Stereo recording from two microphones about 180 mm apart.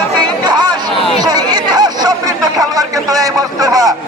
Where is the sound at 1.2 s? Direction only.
20° right (ahead or behind).